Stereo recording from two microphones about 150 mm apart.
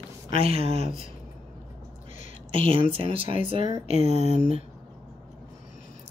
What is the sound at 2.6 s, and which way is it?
Speech, 40° right (ahead or behind).